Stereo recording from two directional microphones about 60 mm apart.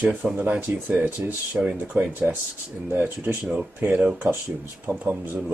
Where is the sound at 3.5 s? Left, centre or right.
Right.